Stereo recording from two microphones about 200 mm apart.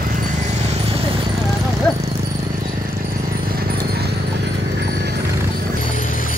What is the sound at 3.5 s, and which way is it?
Clip-clop, 50° right (ahead or behind).